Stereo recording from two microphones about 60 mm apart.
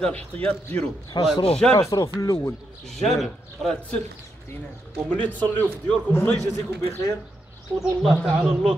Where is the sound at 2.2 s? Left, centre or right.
Left.